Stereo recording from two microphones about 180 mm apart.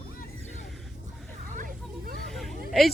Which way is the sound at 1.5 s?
50° right (ahead or behind).